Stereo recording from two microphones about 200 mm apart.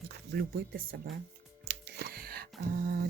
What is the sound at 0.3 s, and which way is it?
Speech, 50° right (ahead or behind).